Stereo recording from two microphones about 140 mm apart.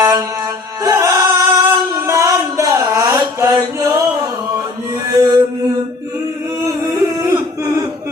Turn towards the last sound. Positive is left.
turn(degrees=-25)  # may be behind; listen again after turning